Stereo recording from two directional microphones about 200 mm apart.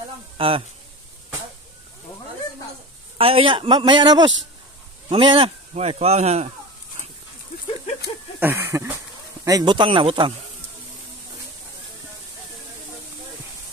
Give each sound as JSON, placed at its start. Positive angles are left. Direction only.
{"t": 0.4, "sound": "a man's voice", "side_deg": -25}
{"t": 3.2, "sound": "a man's voice", "side_deg": -25}
{"t": 8.4, "sound": "a sound", "side_deg": -10}
{"t": 9.4, "sound": "a man's voice", "side_deg": -20}